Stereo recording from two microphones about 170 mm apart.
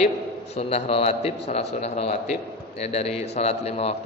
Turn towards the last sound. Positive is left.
turn(degrees=35)  # may be behind; listen again after turning